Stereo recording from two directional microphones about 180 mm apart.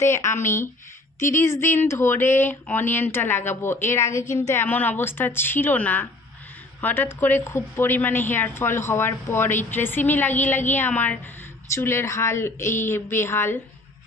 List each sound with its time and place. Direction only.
0.0 s speech: 15° left (ahead or behind)